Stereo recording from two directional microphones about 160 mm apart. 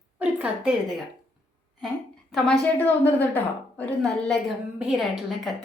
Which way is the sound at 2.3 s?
5° left (ahead or behind).